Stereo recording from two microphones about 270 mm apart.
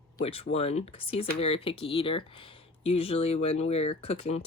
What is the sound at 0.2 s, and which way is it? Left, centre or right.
Speech, left.